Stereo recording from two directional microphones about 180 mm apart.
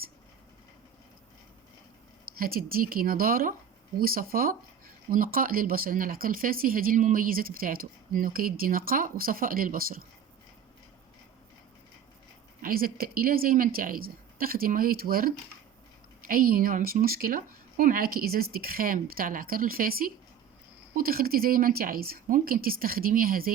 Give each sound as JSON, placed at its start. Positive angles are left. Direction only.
{"t": 2.4, "sound": "speech", "side_deg": -55}
{"t": 12.6, "sound": "speech", "side_deg": -55}